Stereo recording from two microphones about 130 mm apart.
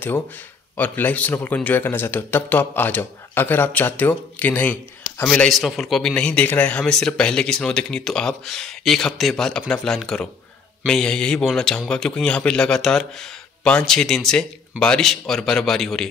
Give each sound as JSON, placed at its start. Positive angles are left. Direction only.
{"t": 0.7, "sound": "a man's voice", "side_deg": 15}